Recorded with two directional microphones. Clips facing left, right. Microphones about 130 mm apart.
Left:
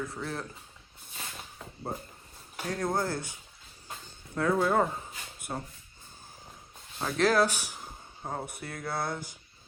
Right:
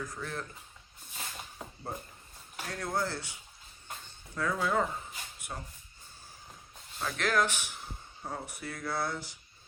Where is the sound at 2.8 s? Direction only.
50° left (ahead or behind).